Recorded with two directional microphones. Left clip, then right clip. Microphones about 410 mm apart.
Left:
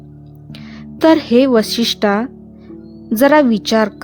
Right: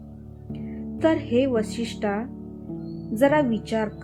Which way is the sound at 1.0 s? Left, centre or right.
Left.